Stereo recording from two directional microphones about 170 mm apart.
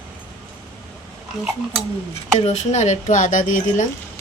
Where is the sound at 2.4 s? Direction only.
45° left (ahead or behind).